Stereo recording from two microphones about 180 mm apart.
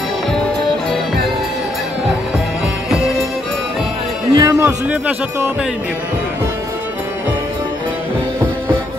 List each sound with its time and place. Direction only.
4.4 s a man's voice: 15° right (ahead or behind)